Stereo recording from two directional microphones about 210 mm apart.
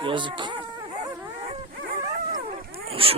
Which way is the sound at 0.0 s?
25° right (ahead or behind).